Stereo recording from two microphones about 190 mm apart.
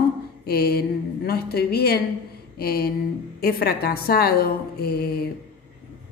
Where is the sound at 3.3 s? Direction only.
55° left (ahead or behind).